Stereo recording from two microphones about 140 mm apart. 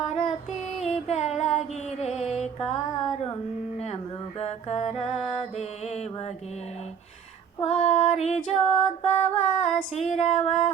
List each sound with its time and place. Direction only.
0.0 s female singing: 50° left (ahead or behind)
0.9 s music: 50° left (ahead or behind)
3.8 s mantra: 50° left (ahead or behind)
7.6 s female singing: 50° left (ahead or behind)